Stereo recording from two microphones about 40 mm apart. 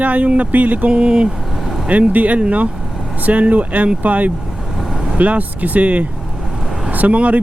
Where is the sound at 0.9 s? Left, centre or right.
Right.